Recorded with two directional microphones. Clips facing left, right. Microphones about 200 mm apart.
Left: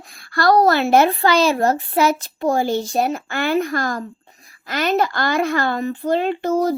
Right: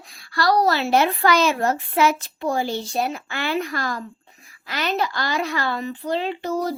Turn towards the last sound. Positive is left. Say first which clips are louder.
# left 6 dB
turn(degrees=50)  # may be behind; listen again after turning